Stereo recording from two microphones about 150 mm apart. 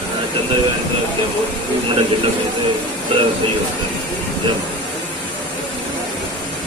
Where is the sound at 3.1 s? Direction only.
35° right (ahead or behind).